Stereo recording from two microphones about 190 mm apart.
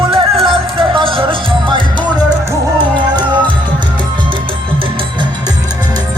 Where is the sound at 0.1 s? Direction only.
30° right (ahead or behind).